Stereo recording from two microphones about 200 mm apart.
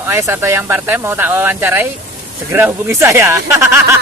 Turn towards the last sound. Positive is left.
turn(degrees=-15)  # may be behind; listen again after turning